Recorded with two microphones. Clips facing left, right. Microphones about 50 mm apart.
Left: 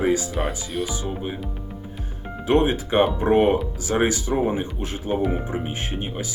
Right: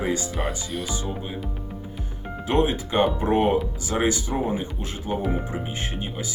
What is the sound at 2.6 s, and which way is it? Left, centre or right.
Speech, left.